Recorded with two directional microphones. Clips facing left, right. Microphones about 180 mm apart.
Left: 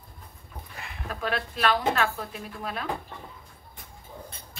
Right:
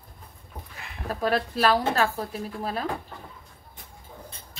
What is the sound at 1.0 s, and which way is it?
Speech, 35° right (ahead or behind).